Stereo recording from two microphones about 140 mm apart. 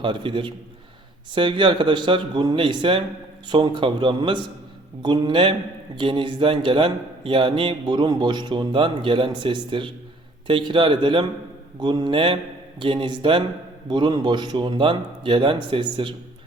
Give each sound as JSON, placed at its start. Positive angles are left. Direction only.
{"t": 0.0, "sound": "a man's voice", "side_deg": -35}